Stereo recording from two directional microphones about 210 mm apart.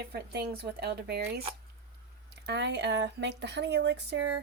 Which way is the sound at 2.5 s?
55° right (ahead or behind).